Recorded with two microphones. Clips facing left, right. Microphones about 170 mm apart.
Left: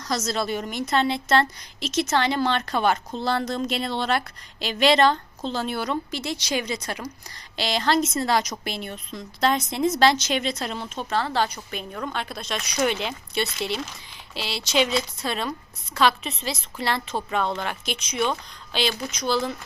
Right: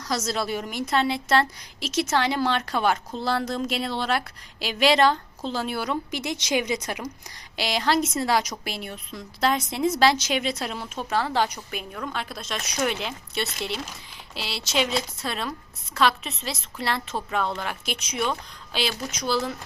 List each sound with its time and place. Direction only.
0.0 s a woman's voice: 10° right (ahead or behind)
6.1 s a woman's voice: 15° right (ahead or behind)